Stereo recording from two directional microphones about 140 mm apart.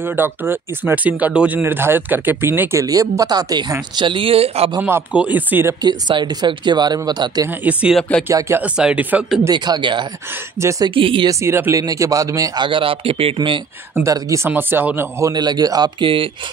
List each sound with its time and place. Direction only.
0.0 s speech: 15° right (ahead or behind); by 4.6 s 45° right (ahead or behind)
4.8 s speech: 10° right (ahead or behind)
5.8 s speech: 30° right (ahead or behind)
7.4 s speech: 10° right (ahead or behind)
9.5 s speech: 30° right (ahead or behind)
10.6 s speech: 20° right (ahead or behind)
11.0 s speech: 40° right (ahead or behind)
11.2 s speech: 15° right (ahead or behind)
12.6 s speech: 40° right (ahead or behind)
14.0 s speech: 20° right (ahead or behind); by 16.3 s 40° right (ahead or behind)